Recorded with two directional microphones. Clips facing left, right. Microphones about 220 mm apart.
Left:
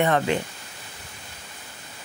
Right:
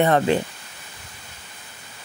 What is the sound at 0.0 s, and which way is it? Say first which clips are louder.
Speech: right 4 dB; 35° right (ahead or behind).